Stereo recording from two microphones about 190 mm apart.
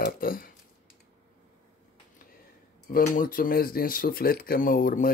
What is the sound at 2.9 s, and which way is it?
Speech, 45° left (ahead or behind).